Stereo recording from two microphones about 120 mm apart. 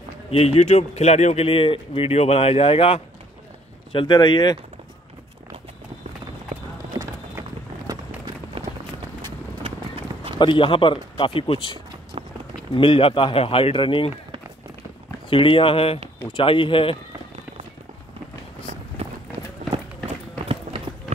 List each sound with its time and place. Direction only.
0.3 s speech: 55° left (ahead or behind); by 4.6 s 40° left (ahead or behind)
7.9 s a sound: 35° right (ahead or behind)
8.6 s run: 45° right (ahead or behind)
10.4 s speech: 45° left (ahead or behind)
12.1 s run: 35° right (ahead or behind)
12.7 s speech: 50° left (ahead or behind)
15.2 s speech: 50° left (ahead or behind)
19.0 s run: 60° right (ahead or behind)